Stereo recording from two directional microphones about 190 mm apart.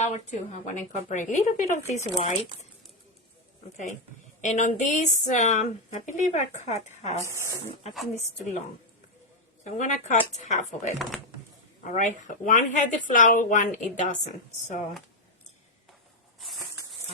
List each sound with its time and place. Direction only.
0.0 s speech: 40° left (ahead or behind)
4.4 s speech: 40° left (ahead or behind)
7.3 s speech: 15° right (ahead or behind)
8.1 s speech: 40° left (ahead or behind)
9.6 s speech: 40° left (ahead or behind)
10.9 s speech: centre (ahead or behind)
11.9 s speech: 40° left (ahead or behind)
16.4 s a sound: centre (ahead or behind)